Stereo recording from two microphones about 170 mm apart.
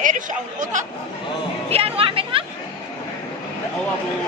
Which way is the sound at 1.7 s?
35° right (ahead or behind).